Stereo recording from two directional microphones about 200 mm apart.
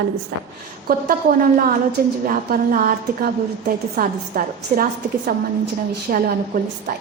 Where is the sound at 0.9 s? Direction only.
50° right (ahead or behind).